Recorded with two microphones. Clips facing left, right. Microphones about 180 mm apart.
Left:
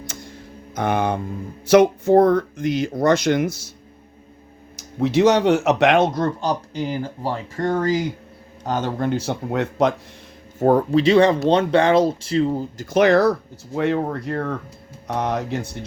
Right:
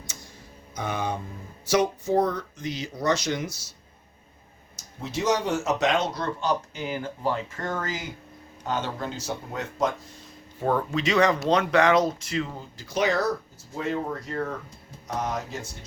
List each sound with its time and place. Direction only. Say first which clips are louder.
0.0 s a sound: left 9 dB; 55° left (ahead or behind)
0.8 s speech: left 8 dB; 60° left (ahead or behind)
4.8 s speech: left 13 dB; 70° left (ahead or behind)
6.2 s speech: left 4 dB; 35° left (ahead or behind)
8.6 s speech: left 7 dB; 45° left (ahead or behind); by 9.9 s 70° left (ahead or behind)
10.6 s speech: left 9 dB; 40° left (ahead or behind); by 15.8 s 65° left (ahead or behind)